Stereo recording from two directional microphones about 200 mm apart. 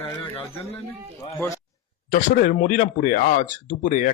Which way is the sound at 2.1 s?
40° left (ahead or behind).